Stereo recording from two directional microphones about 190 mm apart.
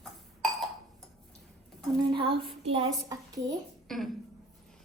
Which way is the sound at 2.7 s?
30° right (ahead or behind).